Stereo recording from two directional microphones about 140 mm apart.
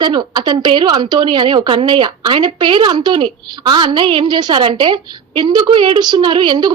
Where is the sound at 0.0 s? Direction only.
30° right (ahead or behind).